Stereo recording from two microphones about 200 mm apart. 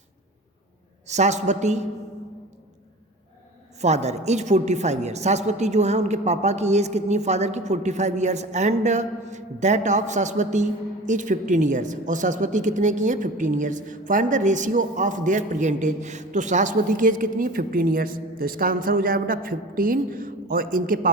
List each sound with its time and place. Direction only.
1.0 s a woman's voice: 35° right (ahead or behind)
3.8 s a woman's voice: 35° right (ahead or behind)